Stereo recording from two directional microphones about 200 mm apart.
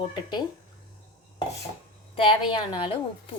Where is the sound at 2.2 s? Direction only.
25° left (ahead or behind).